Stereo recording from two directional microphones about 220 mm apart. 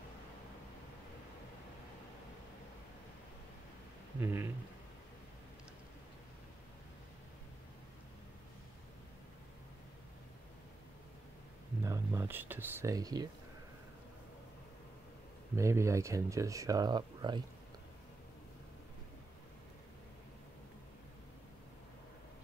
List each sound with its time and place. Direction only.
4.2 s speech: 10° right (ahead or behind)
11.8 s speech: 15° right (ahead or behind)
15.5 s speech: 15° right (ahead or behind)